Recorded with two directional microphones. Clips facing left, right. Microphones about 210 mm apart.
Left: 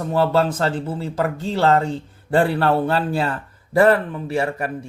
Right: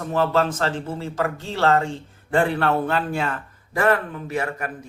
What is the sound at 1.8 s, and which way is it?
A man's voice, 35° left (ahead or behind).